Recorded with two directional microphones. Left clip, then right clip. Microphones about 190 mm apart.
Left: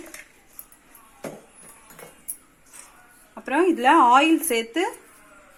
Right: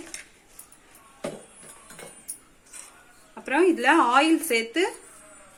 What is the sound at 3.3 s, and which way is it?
Speech, 20° left (ahead or behind).